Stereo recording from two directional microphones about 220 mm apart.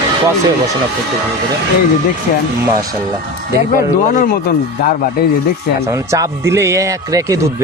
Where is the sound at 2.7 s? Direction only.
15° right (ahead or behind).